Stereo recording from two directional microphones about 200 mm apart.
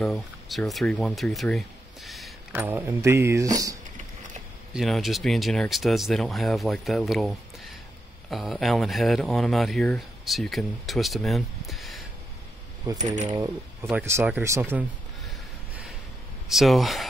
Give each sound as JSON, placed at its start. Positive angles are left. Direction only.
{"t": 0.0, "sound": "speech", "side_deg": 0}
{"t": 2.0, "sound": "a sound", "side_deg": 0}
{"t": 2.5, "sound": "speech", "side_deg": -10}
{"t": 4.7, "sound": "speech", "side_deg": 0}
{"t": 12.9, "sound": "coin", "side_deg": -35}
{"t": 13.3, "sound": "speech", "side_deg": -10}